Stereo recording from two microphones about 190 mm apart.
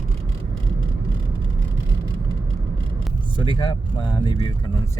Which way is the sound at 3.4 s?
25° left (ahead or behind).